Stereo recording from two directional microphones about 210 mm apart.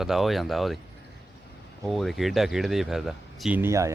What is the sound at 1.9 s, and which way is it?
Speech, centre (ahead or behind).